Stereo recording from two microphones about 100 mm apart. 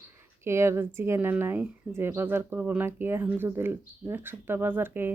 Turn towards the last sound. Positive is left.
turn(degrees=-20)  # may be behind; listen again after turning